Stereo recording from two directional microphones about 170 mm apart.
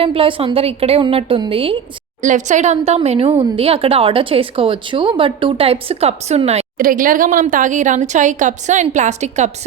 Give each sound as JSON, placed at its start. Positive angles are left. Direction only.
{"t": 0.0, "sound": "a woman's voice", "side_deg": -30}
{"t": 2.2, "sound": "a woman's voice", "side_deg": -45}
{"t": 6.7, "sound": "speech", "side_deg": -55}